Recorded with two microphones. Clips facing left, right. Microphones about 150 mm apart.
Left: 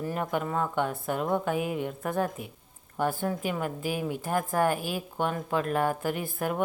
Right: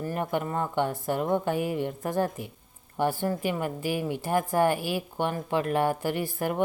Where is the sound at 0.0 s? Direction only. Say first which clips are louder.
Right 1 dB; centre (ahead or behind).